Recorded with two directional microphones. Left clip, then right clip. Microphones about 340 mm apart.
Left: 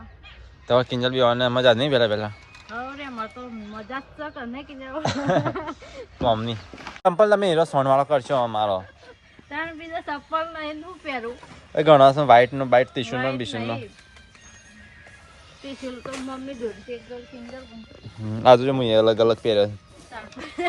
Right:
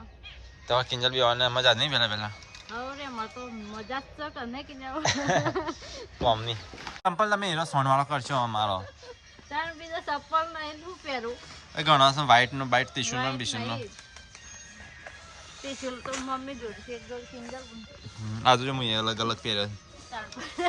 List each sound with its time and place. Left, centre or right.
0.7 s a woman's voice: centre
15.6 s a woman's voice: centre
18.3 s a woman's voice: centre